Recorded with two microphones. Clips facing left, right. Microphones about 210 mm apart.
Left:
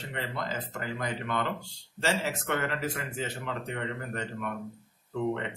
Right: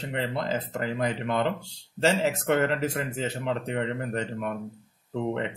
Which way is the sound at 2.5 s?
35° right (ahead or behind).